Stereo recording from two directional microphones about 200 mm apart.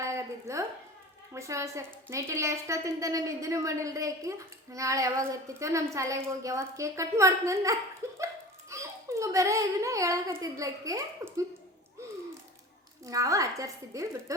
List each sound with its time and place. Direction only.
0.0 s a sound: 15° right (ahead or behind)
1.3 s a woman's voice: 15° right (ahead or behind)
13.1 s a woman's voice: 15° right (ahead or behind)